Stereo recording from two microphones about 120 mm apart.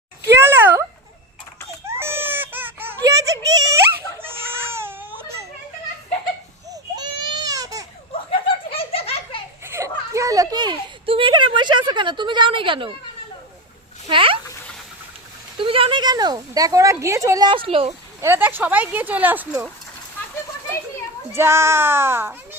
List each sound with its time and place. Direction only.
0.3 s a sound: 20° right (ahead or behind)
1.8 s baby cry: 20° right (ahead or behind)
3.0 s a sound: 30° right (ahead or behind)
4.3 s baby cry: 20° right (ahead or behind)
6.7 s baby cry: 30° right (ahead or behind)
8.7 s laughter: 50° left (ahead or behind)
9.6 s a sound: 25° right (ahead or behind); by 12.9 s 45° right (ahead or behind)
14.1 s a sound: 45° right (ahead or behind)
15.5 s speech: 50° right (ahead or behind); by 17.5 s 25° right (ahead or behind)
17.5 s speech: 50° right (ahead or behind)
18.2 s speech: 20° right (ahead or behind)
21.3 s speech: 20° right (ahead or behind)